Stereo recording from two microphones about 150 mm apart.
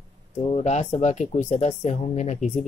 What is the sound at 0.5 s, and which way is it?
Speech, 45° left (ahead or behind).